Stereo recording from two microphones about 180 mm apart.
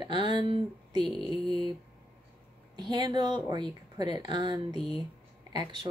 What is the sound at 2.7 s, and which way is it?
Speech, 25° right (ahead or behind).